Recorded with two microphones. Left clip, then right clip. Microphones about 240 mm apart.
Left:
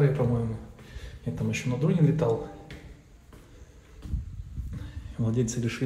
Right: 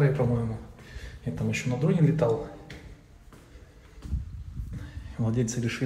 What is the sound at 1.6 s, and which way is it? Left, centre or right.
Speech, centre.